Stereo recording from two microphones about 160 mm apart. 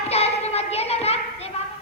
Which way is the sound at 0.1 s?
40° left (ahead or behind).